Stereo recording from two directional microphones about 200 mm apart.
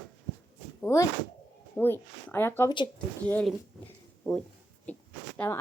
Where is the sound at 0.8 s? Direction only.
15° left (ahead or behind).